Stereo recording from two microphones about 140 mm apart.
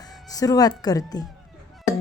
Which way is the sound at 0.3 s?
25° left (ahead or behind).